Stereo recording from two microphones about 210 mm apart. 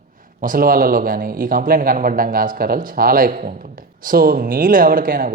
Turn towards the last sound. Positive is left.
turn(degrees=-40)  # may be behind; listen again after turning